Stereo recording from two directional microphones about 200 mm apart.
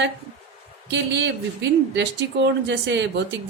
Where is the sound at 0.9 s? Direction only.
60° right (ahead or behind).